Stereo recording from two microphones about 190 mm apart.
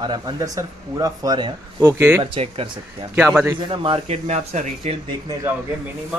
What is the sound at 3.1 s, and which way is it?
Speech, 5° right (ahead or behind).